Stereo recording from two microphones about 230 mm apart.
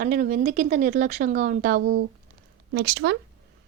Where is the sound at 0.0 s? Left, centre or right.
Right.